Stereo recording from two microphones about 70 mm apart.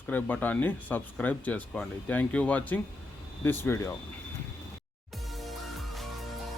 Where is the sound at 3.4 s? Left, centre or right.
Left.